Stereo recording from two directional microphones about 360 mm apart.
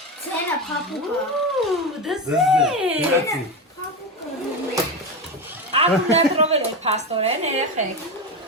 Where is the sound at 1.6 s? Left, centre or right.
Centre.